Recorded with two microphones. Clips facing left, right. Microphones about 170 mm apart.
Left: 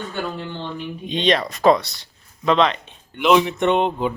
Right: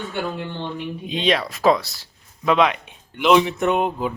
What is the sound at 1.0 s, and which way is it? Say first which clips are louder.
Speech: left 2 dB; 5° right (ahead or behind).